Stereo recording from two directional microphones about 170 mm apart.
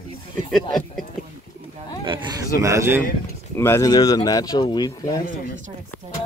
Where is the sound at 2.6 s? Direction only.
15° right (ahead or behind).